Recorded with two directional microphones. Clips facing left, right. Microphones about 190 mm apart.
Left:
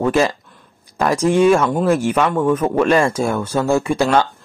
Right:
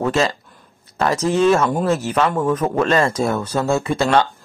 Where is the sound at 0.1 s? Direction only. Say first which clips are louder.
Left 3 dB; 10° left (ahead or behind).